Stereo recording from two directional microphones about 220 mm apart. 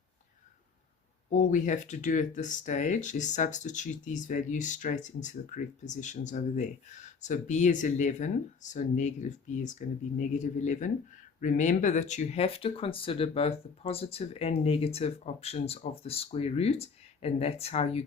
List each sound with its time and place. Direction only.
1.3 s speech: 35° left (ahead or behind)